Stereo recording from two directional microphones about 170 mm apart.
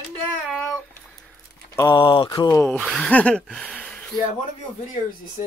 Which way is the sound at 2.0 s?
30° left (ahead or behind).